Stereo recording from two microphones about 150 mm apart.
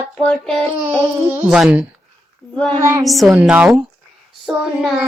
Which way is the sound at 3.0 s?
Centre (ahead or behind).